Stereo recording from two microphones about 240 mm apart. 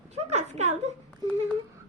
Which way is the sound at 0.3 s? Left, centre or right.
Right.